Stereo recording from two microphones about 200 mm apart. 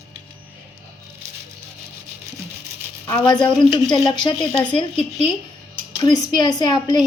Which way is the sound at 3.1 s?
20° left (ahead or behind).